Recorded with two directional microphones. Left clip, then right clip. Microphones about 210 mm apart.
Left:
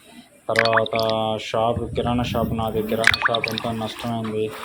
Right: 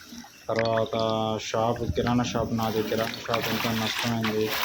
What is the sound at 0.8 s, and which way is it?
Speech, 10° right (ahead or behind).